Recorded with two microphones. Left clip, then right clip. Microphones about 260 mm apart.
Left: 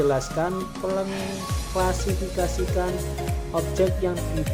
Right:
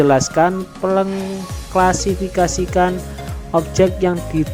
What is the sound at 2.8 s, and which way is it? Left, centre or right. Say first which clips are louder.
Speech: right 12 dB; right.